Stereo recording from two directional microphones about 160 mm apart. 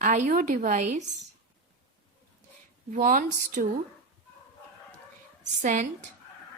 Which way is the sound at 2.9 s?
60° right (ahead or behind).